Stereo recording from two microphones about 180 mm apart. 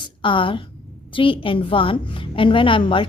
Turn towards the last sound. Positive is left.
turn(degrees=30)  # may be behind; listen again after turning